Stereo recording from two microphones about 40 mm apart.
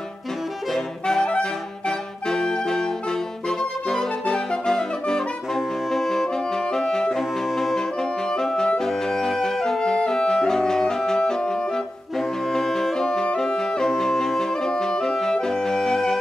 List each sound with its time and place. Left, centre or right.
0.7 s music: centre
5.9 s music: centre
6.2 s saxophone: centre
7.2 s music: centre
7.7 s music: centre
12.2 s brass instrument: centre
12.9 s music: centre